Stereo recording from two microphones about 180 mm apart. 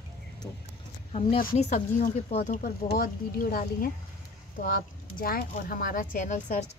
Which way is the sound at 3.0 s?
55° left (ahead or behind).